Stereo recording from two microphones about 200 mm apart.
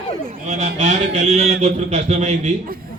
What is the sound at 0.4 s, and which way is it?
Speech, 35° right (ahead or behind).